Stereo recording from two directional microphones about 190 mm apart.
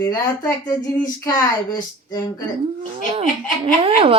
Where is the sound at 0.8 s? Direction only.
45° left (ahead or behind).